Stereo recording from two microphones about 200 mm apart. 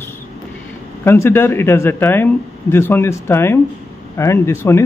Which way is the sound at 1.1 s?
10° left (ahead or behind).